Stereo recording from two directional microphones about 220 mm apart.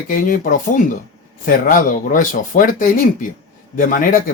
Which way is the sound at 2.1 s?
40° left (ahead or behind).